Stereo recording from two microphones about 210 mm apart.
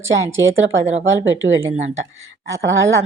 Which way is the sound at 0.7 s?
60° right (ahead or behind).